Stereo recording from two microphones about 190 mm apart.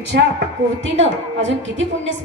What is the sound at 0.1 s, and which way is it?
Speech, 60° right (ahead or behind).